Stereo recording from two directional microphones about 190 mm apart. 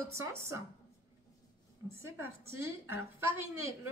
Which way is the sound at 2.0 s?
15° right (ahead or behind).